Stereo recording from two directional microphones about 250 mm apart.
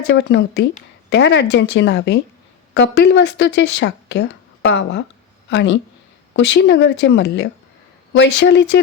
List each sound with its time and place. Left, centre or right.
0.1 s speech: left